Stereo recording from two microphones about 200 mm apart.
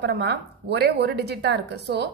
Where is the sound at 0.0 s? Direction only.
55° right (ahead or behind).